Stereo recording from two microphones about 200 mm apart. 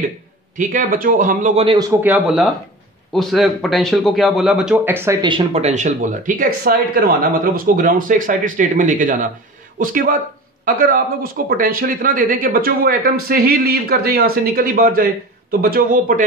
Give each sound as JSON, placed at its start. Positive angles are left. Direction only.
{"t": 0.6, "sound": "speech", "side_deg": -45}
{"t": 1.6, "sound": "a man's voice", "side_deg": -20}